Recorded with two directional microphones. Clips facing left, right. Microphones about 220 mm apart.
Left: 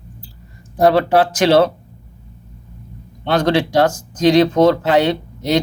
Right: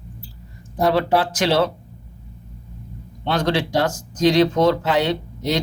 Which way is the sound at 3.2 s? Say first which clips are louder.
Left 5 dB; 60° left (ahead or behind).